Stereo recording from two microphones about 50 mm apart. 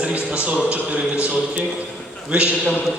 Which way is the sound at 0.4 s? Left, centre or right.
Right.